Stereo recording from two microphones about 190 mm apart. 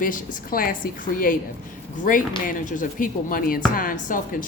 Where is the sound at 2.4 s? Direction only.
45° left (ahead or behind).